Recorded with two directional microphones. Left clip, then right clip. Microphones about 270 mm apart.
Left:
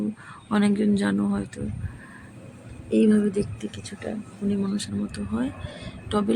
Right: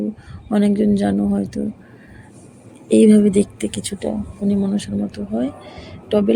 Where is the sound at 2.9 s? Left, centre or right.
Centre.